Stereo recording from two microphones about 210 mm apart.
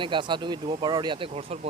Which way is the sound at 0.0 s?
20° right (ahead or behind).